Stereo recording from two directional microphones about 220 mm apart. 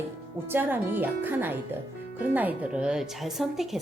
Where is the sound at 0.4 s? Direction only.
10° right (ahead or behind).